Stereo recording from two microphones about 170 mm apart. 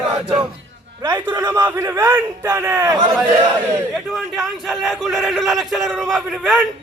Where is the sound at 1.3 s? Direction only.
20° right (ahead or behind).